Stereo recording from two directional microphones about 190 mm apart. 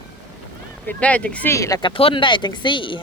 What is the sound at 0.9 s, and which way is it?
Speech, 5° left (ahead or behind).